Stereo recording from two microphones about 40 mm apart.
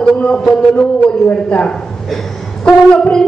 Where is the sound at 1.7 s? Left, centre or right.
Centre.